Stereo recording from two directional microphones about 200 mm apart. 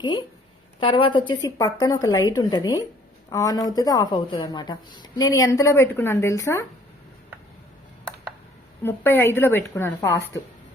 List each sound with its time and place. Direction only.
0.0 s speech: 20° left (ahead or behind)
8.8 s speech: 10° left (ahead or behind)